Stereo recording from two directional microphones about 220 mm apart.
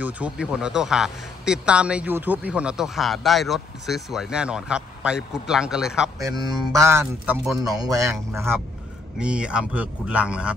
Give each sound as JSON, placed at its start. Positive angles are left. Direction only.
{"t": 0.0, "sound": "a man's voice", "side_deg": -5}
{"t": 6.1, "sound": "speech", "side_deg": -15}
{"t": 9.2, "sound": "a man's voice", "side_deg": -5}